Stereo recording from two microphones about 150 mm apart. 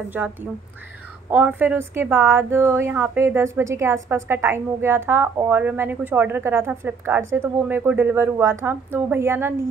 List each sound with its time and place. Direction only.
0.5 s a woman's voice: centre (ahead or behind)
1.3 s a woman's voice: 10° right (ahead or behind)